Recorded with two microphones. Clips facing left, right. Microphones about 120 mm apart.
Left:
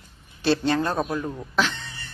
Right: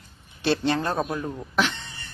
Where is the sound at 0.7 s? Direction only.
30° right (ahead or behind).